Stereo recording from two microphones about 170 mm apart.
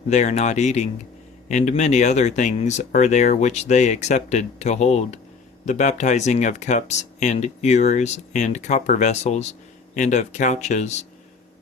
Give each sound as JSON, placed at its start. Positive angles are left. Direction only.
{"t": 0.1, "sound": "speech", "side_deg": 40}